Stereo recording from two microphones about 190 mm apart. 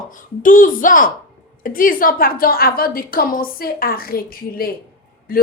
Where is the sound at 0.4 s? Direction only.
45° left (ahead or behind).